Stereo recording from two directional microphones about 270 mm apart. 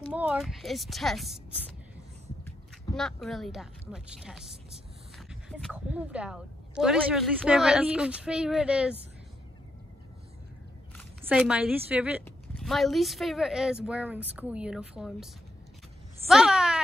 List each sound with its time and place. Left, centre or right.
0.1 s speech: centre
2.9 s speech: centre
11.2 s speech: centre
16.3 s speech: centre